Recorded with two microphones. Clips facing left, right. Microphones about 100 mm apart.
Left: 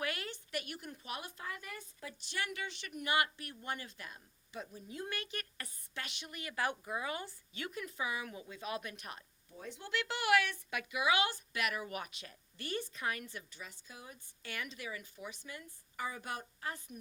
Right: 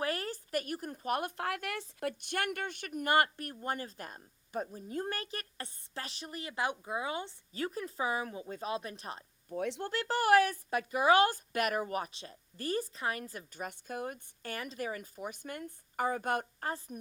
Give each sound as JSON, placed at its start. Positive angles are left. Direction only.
{"t": 0.0, "sound": "speech", "side_deg": -40}
{"t": 7.5, "sound": "speech", "side_deg": -35}
{"t": 9.5, "sound": "speech", "side_deg": -70}
{"t": 9.8, "sound": "speech", "side_deg": -40}
{"t": 14.5, "sound": "a woman's voice", "side_deg": -40}